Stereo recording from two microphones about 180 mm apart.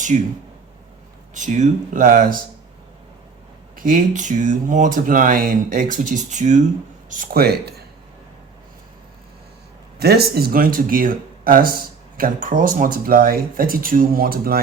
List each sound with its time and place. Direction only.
0.1 s speech: 40° right (ahead or behind)
1.3 s speech: 45° right (ahead or behind)
3.8 s speech: 50° right (ahead or behind)
10.0 s speech: 60° right (ahead or behind)